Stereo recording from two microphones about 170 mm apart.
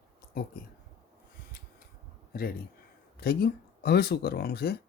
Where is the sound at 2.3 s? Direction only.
60° left (ahead or behind).